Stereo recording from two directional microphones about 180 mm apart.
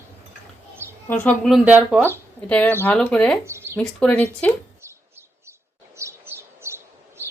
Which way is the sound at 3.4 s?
15° right (ahead or behind).